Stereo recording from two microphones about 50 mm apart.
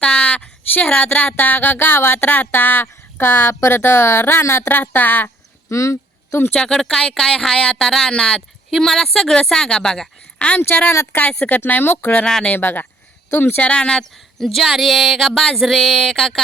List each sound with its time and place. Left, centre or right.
0.0 s a sound: left
3.7 s speech: left
4.9 s speech: left
5.6 s a sound: left
6.5 s a woman's voice: centre
10.3 s a sound: left
11.1 s speech: left
12.2 s a woman's voice: centre
12.5 s speech: left
13.6 s a woman's voice: left